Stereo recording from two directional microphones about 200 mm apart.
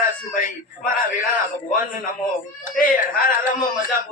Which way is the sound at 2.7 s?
45° left (ahead or behind).